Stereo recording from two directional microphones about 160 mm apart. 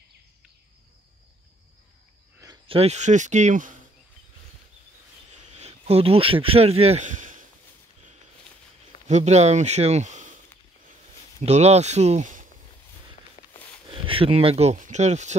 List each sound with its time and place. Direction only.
2.4 s speech: 35° right (ahead or behind); by 3.7 s 50° right (ahead or behind)
5.6 s speech: 40° right (ahead or behind)
9.0 s speech: 45° right (ahead or behind)
11.4 s speech: 40° right (ahead or behind)
13.4 s a sound: 40° left (ahead or behind)
14.0 s speech: 35° right (ahead or behind)